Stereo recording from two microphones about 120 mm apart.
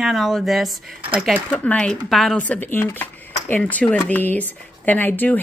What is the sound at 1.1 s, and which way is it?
Speech, 10° right (ahead or behind).